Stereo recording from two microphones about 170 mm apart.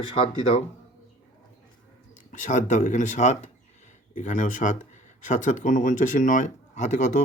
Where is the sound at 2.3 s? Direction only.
45° left (ahead or behind).